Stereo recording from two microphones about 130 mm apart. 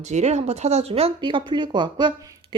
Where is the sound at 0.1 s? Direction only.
60° right (ahead or behind).